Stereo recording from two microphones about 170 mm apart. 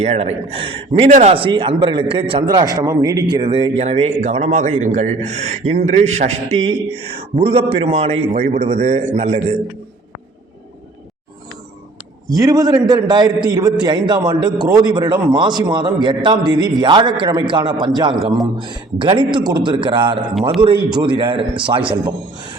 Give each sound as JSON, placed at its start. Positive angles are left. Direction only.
{"t": 0.0, "sound": "a man's voice", "side_deg": -40}
{"t": 12.3, "sound": "a man's voice", "side_deg": -20}